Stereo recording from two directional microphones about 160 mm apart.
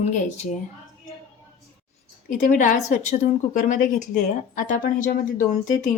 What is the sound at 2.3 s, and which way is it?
A woman's voice, 55° left (ahead or behind).